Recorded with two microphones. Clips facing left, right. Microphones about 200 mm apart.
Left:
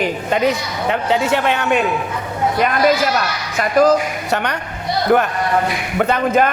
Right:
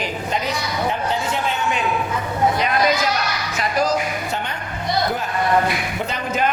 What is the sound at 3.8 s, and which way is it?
Speech, 55° left (ahead or behind).